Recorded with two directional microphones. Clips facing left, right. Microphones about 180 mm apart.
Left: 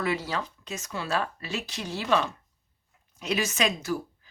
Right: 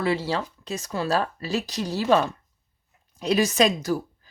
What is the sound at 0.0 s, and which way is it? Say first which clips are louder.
Speech: right 4 dB; 30° right (ahead or behind).